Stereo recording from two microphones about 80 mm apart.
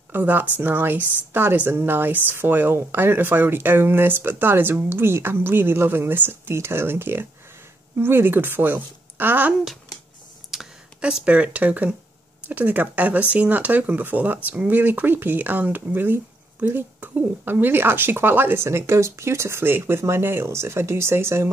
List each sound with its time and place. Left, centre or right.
0.1 s speech: right
10.5 s a sound: centre
12.4 s speech: right